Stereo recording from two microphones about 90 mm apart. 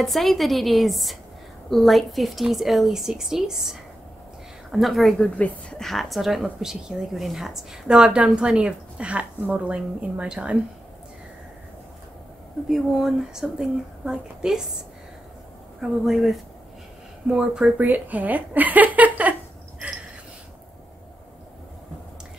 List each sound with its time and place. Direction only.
0.0 s a woman's voice: centre (ahead or behind)
12.6 s a woman's voice: 5° right (ahead or behind)
15.8 s a woman's voice: centre (ahead or behind); by 19.3 s 15° right (ahead or behind)